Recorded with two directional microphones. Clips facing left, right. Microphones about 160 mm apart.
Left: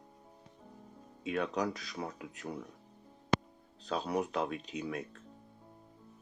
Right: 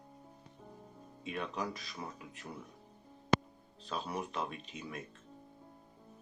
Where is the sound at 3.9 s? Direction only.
90° left.